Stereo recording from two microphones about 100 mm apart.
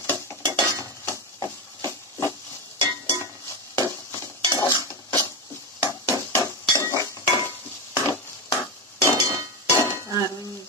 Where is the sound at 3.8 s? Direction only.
30° left (ahead or behind).